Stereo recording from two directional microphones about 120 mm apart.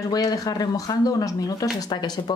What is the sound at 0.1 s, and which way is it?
Speech, 35° left (ahead or behind).